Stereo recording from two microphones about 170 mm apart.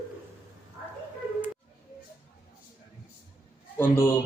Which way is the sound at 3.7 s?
15° left (ahead or behind).